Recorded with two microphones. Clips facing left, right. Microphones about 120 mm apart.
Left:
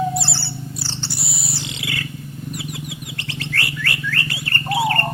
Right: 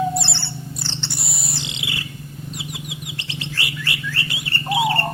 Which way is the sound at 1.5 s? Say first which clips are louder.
Left 3 dB; 20° right (ahead or behind).